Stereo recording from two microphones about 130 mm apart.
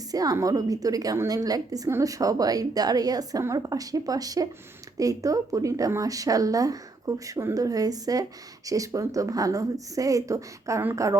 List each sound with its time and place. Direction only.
0.1 s a woman's voice: 30° right (ahead or behind)